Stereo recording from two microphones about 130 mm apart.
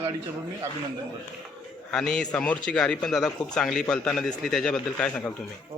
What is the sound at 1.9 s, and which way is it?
A man's voice, 5° left (ahead or behind).